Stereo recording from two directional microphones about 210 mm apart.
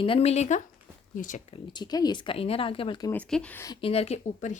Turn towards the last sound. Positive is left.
turn(degrees=35)  # may be behind; listen again after turning